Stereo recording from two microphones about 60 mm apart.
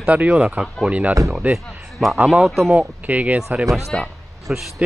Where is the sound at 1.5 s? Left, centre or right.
Centre.